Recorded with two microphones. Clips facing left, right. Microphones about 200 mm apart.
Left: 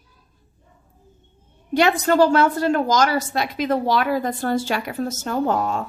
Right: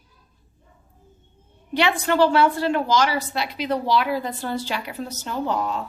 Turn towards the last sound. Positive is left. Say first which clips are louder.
# left 4 dB
turn(degrees=45)  # may be behind; listen again after turning